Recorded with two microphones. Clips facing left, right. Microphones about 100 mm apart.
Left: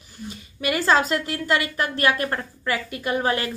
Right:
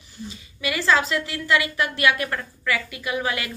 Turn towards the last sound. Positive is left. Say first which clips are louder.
# left 3 dB
turn(degrees=40)  # may be behind; listen again after turning